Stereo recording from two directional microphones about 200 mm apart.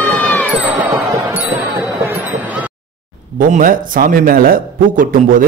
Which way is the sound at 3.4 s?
40° right (ahead or behind).